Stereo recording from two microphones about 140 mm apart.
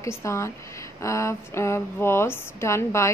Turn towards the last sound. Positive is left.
turn(degrees=20)  # may be behind; listen again after turning